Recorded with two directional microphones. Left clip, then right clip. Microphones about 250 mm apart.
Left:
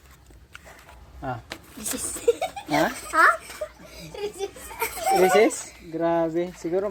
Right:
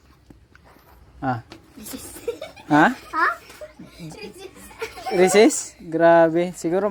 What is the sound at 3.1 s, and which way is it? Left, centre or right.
Speech, centre.